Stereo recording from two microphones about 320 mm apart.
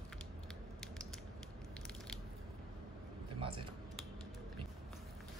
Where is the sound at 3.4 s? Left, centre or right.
Centre.